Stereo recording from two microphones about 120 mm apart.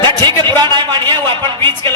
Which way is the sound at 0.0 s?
40° right (ahead or behind).